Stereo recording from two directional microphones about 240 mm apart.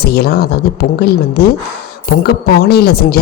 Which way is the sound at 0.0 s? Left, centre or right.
Left.